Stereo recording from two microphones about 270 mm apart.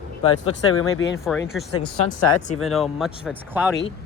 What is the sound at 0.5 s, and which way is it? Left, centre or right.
Speech, left.